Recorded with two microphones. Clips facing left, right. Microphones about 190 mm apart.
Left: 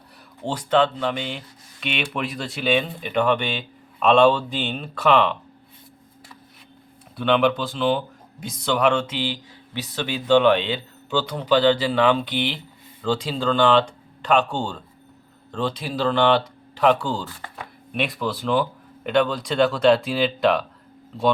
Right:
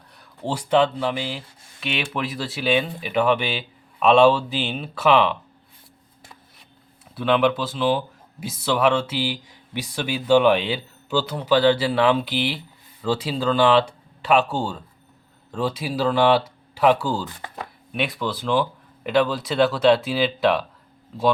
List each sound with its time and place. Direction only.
0.4 s speech: 10° right (ahead or behind)
7.2 s speech: centre (ahead or behind)